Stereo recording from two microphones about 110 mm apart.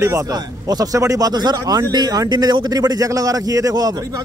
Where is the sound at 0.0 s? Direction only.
30° right (ahead or behind).